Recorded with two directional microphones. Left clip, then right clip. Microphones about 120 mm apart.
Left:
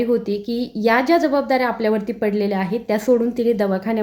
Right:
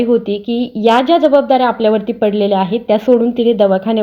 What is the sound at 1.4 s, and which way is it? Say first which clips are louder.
Speech: right 7 dB; 40° left (ahead or behind).